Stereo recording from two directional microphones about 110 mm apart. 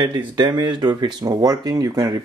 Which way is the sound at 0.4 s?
40° right (ahead or behind).